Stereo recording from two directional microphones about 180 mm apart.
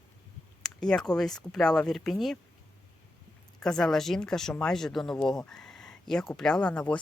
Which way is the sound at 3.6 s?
5° left (ahead or behind).